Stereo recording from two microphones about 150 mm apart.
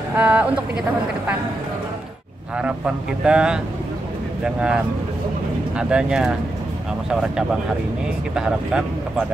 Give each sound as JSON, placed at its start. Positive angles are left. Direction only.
{"t": 0.1, "sound": "speech", "side_deg": -10}
{"t": 2.5, "sound": "speech", "side_deg": -5}